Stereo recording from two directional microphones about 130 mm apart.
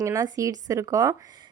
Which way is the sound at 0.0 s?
25° right (ahead or behind).